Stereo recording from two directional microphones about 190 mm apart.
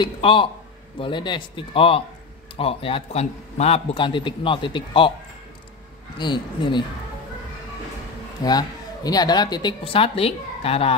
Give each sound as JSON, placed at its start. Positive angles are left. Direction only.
{"t": 0.0, "sound": "a man's voice", "side_deg": 25}
{"t": 6.1, "sound": "a man's voice", "side_deg": 25}
{"t": 8.5, "sound": "a man's voice", "side_deg": 20}